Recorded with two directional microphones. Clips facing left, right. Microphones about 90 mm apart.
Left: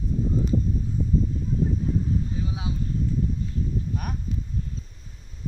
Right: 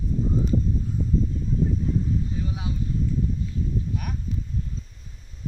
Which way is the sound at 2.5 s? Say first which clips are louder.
Even; 20° left (ahead or behind).